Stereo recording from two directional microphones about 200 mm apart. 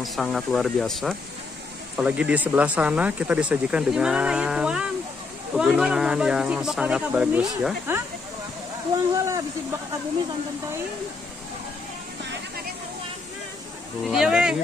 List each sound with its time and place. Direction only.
0.0 s speech: centre (ahead or behind)
9.1 s a sound: 15° right (ahead or behind)
14.0 s speech: centre (ahead or behind)